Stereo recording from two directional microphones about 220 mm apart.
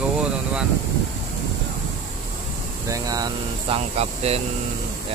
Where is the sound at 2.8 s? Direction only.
15° right (ahead or behind).